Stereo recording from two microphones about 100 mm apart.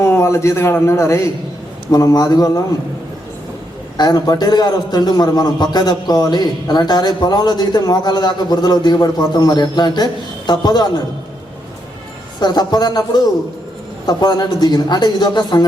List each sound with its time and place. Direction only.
0.0 s a man's voice: 30° left (ahead or behind)
3.9 s a man's voice: 40° left (ahead or behind)
12.4 s a man's voice: 40° left (ahead or behind)